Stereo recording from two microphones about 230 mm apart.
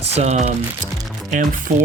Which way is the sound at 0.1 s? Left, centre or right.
Right.